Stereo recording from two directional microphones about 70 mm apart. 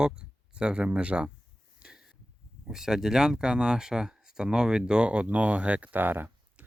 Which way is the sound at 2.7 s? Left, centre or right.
Centre.